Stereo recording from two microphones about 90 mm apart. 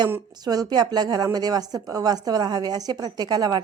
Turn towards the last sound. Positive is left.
turn(degrees=-45)  # may be behind; listen again after turning